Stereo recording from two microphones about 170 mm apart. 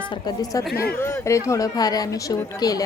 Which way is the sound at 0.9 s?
15° left (ahead or behind).